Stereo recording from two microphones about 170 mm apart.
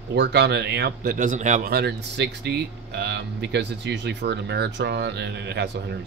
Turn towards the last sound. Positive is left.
turn(degrees=-80)